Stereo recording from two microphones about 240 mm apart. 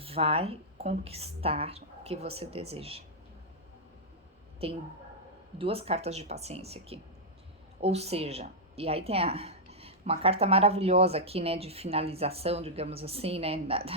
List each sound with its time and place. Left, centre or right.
0.0 s a woman's voice: right
4.6 s a woman's voice: right